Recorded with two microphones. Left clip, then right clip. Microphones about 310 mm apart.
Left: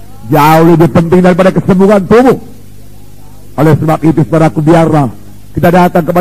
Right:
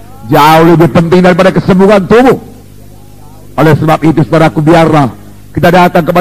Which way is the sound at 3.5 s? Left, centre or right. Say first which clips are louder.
Right 2 dB; right.